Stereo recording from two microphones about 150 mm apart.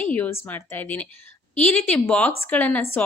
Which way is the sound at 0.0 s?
10° left (ahead or behind).